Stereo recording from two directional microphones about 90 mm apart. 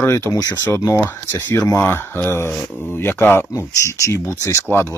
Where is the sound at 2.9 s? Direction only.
25° left (ahead or behind).